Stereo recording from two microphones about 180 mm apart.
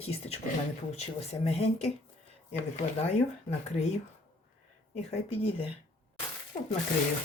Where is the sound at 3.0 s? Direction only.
40° left (ahead or behind).